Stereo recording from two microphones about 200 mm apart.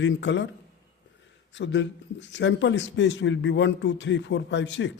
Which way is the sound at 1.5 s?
65° left (ahead or behind).